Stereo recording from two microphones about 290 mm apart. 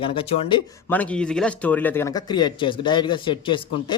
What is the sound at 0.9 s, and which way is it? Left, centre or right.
A man's voice, centre.